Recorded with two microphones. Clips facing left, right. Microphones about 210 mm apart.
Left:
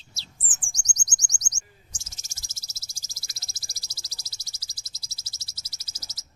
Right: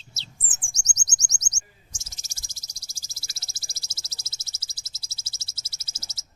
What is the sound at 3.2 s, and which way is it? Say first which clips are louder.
Frog: right 1 dB; 30° right (ahead or behind).